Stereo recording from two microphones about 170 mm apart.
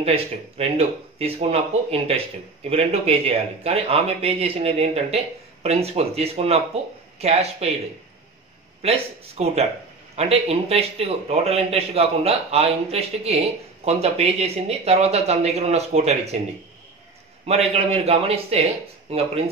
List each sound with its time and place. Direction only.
0.6 s a man's voice: 35° right (ahead or behind)
8.8 s a man's voice: 35° right (ahead or behind)
17.5 s a man's voice: 35° right (ahead or behind)